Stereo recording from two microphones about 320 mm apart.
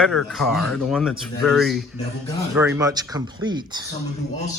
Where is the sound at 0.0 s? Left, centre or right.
Centre.